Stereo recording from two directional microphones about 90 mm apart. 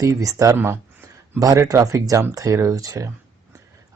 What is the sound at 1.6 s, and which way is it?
Speech, 40° right (ahead or behind).